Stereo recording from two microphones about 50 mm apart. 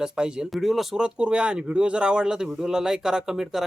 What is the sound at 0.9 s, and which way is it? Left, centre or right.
Speech, centre.